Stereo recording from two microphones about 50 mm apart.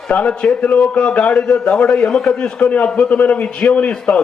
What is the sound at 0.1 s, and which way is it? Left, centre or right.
Speech, left.